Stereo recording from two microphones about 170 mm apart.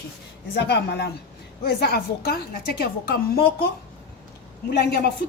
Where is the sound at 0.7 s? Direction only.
75° left (ahead or behind).